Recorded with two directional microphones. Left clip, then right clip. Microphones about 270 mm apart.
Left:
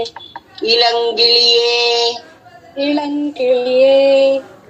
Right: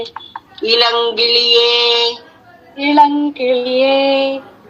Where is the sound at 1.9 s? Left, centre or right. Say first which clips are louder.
Right 1 dB; centre.